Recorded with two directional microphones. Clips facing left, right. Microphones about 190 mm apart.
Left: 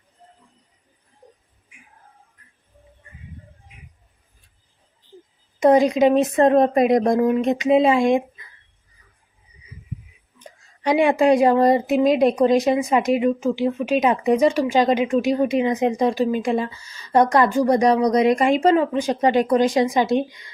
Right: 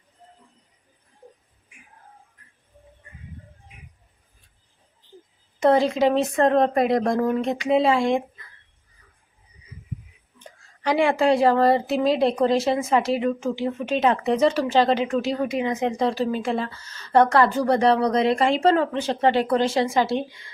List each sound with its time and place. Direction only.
5.6 s speech: 15° left (ahead or behind)
10.8 s speech: 20° left (ahead or behind)